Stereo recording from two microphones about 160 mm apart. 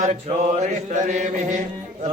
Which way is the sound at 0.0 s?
50° right (ahead or behind).